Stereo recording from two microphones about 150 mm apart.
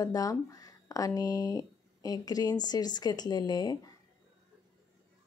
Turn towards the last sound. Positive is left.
turn(degrees=25)  # may be behind; listen again after turning